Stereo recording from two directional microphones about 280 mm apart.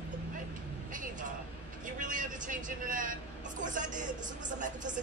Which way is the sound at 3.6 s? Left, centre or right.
Right.